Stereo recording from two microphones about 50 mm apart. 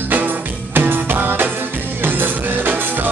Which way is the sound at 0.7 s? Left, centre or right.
Right.